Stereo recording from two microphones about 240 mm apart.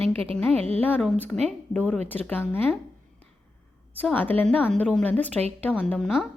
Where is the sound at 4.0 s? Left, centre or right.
Centre.